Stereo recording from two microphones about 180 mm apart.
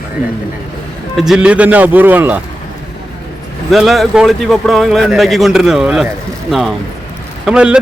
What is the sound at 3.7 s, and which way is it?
Speech, centre (ahead or behind).